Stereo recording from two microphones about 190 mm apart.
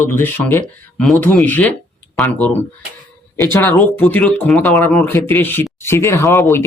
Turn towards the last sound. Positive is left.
turn(degrees=15)  # may be behind; listen again after turning